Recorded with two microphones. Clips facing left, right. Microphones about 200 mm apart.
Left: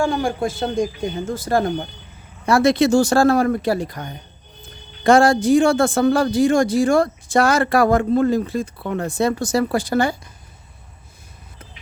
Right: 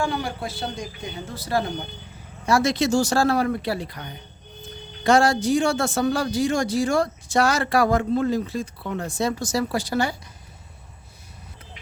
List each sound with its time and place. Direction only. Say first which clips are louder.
0.0 s speech: left 6 dB; 45° left (ahead or behind)
2.5 s speech: left 5 dB; 60° left (ahead or behind)